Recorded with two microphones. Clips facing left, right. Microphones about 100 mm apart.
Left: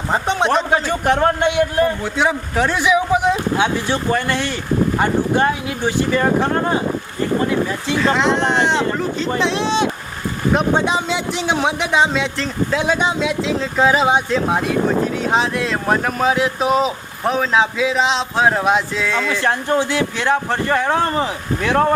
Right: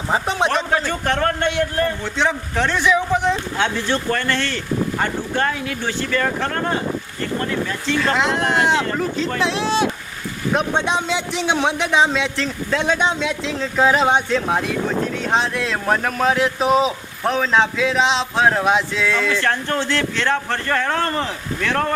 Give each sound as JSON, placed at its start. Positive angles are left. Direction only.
{"t": 0.1, "sound": "speech", "side_deg": 0}
{"t": 0.7, "sound": "a man's voice", "side_deg": 15}
{"t": 19.3, "sound": "a man's voice", "side_deg": 15}